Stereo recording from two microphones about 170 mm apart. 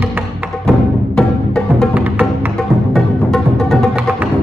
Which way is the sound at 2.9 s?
Centre (ahead or behind).